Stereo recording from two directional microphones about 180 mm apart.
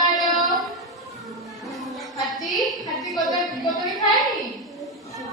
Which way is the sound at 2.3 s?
Centre (ahead or behind).